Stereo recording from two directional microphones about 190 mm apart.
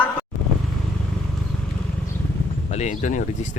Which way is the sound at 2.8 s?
40° left (ahead or behind).